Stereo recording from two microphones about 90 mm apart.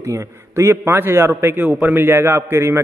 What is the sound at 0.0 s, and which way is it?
A man's voice, 35° right (ahead or behind).